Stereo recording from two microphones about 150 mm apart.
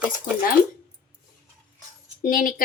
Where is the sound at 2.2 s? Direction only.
65° left (ahead or behind).